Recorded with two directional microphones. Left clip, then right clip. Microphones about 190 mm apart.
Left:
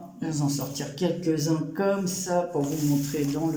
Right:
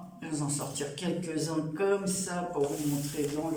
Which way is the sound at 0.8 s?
35° left (ahead or behind).